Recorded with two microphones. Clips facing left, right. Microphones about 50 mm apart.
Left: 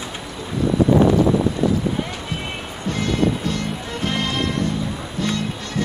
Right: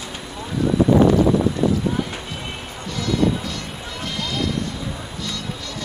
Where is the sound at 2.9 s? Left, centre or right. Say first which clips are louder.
Even; left.